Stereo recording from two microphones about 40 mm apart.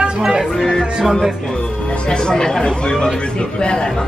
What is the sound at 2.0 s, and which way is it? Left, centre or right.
Speech, centre.